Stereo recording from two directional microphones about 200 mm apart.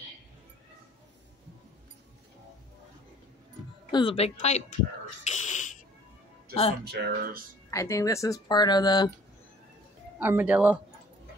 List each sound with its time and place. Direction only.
3.9 s a woman's voice: 25° left (ahead or behind)
5.2 s a sound: 35° left (ahead or behind)
6.8 s speech: 55° right (ahead or behind)
7.7 s speech: 15° left (ahead or behind)
10.1 s speech: 10° right (ahead or behind)